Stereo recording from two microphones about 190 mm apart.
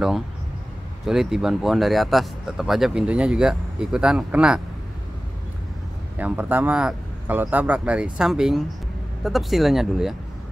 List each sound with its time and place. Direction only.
1.0 s speech: centre (ahead or behind)
6.1 s speech: 10° right (ahead or behind)